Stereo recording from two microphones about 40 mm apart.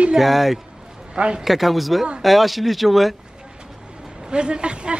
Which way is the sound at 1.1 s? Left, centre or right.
Right.